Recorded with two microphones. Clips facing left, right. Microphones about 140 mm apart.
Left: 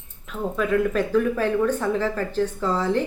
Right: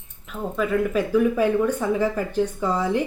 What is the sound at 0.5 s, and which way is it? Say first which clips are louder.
Speech: even; centre (ahead or behind).